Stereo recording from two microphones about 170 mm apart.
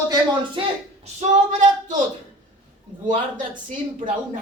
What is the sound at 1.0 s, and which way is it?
Female singing, 40° right (ahead or behind).